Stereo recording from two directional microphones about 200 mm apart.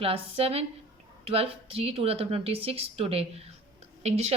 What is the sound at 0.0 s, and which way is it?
A woman's voice, 30° right (ahead or behind).